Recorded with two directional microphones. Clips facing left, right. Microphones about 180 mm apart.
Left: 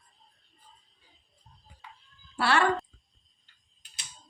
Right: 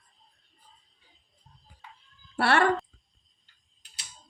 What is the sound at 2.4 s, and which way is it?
Speech, 55° right (ahead or behind).